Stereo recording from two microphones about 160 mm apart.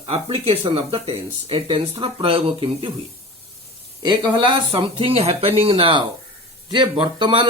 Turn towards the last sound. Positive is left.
turn(degrees=-30)  # may be behind; listen again after turning